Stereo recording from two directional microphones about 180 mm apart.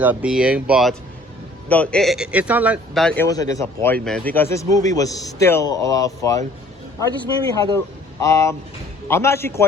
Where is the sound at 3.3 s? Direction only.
20° left (ahead or behind).